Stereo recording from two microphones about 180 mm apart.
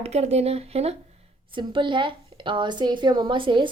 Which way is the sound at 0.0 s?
35° right (ahead or behind).